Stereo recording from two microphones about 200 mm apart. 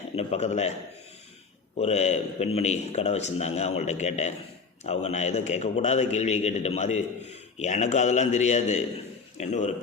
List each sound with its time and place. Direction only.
0.2 s a man's voice: 30° left (ahead or behind)
1.7 s a man's voice: 35° left (ahead or behind)